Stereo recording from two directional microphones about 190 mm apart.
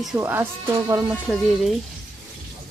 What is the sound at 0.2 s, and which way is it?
Speech, 10° right (ahead or behind).